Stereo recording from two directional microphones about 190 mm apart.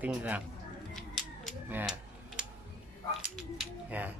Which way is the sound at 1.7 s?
5° right (ahead or behind).